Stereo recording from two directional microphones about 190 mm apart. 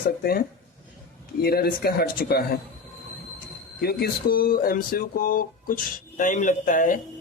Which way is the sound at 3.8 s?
55° left (ahead or behind).